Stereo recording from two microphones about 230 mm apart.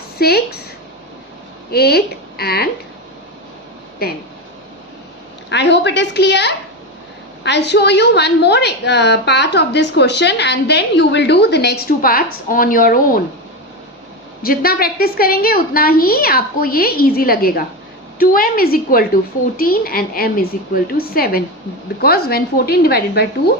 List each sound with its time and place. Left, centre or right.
0.2 s a woman's voice: left
1.7 s speech: left
5.5 s a woman's voice: left
14.4 s a woman's voice: left